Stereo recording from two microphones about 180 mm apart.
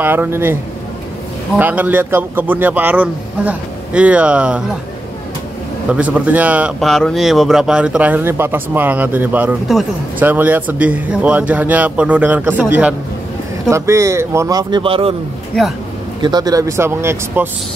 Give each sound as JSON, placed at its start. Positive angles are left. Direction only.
{"t": 0.0, "sound": "speech", "side_deg": -10}
{"t": 1.6, "sound": "speech", "side_deg": -10}
{"t": 5.9, "sound": "speech", "side_deg": -10}
{"t": 16.2, "sound": "speech", "side_deg": -25}